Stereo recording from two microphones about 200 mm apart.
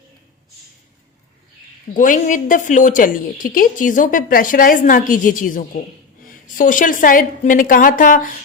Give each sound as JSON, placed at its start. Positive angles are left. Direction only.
{"t": 1.9, "sound": "a woman's voice", "side_deg": 40}